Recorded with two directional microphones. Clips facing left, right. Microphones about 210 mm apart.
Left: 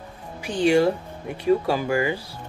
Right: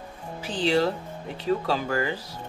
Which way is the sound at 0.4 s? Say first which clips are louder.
Left 5 dB; 15° left (ahead or behind).